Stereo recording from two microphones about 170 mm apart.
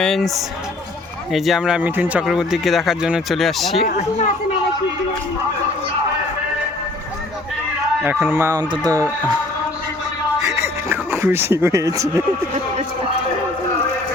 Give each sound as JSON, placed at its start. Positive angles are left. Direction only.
{"t": 0.0, "sound": "speech", "side_deg": 0}
{"t": 8.0, "sound": "a man's voice", "side_deg": -10}
{"t": 10.4, "sound": "music", "side_deg": -15}